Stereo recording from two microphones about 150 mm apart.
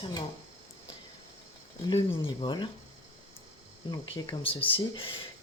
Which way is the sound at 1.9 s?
35° left (ahead or behind).